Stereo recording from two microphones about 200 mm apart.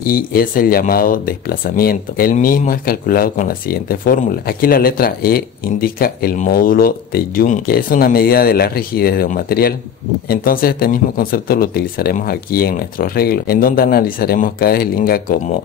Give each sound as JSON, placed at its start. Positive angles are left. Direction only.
{"t": 0.0, "sound": "speech", "side_deg": 45}